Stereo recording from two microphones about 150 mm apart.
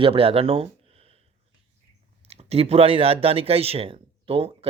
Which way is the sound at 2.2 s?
40° right (ahead or behind).